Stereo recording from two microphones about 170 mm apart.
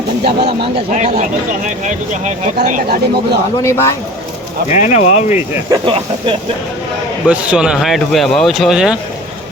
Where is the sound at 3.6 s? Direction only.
15° left (ahead or behind).